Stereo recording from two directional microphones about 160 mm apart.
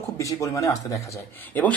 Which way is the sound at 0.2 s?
20° left (ahead or behind).